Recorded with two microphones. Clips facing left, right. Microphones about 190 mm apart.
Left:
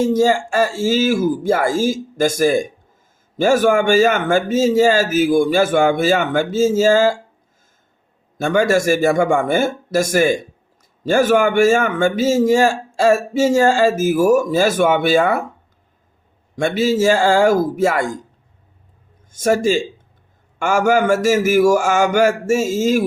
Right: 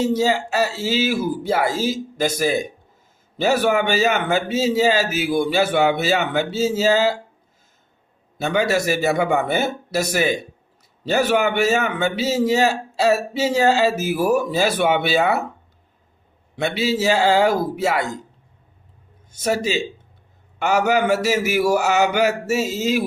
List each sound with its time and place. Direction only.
0.0 s a man's voice: 45° left (ahead or behind)
8.4 s a man's voice: 50° left (ahead or behind)
16.6 s a man's voice: 45° left (ahead or behind)
19.3 s a man's voice: 50° left (ahead or behind)